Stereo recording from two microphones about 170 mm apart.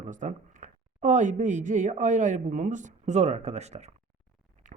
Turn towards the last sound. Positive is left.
turn(degrees=-50)  # may be behind; listen again after turning